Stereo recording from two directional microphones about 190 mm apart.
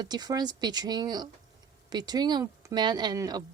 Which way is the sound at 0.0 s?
20° right (ahead or behind).